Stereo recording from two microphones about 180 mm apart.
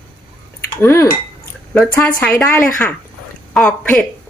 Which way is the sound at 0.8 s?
15° left (ahead or behind).